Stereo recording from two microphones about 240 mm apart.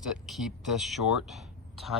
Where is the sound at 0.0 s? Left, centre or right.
Centre.